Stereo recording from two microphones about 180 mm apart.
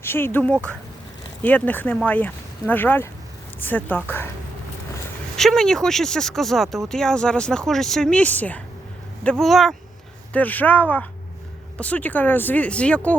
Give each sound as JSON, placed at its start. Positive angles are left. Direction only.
{"t": 0.0, "sound": "speech", "side_deg": 10}
{"t": 5.4, "sound": "speech", "side_deg": 5}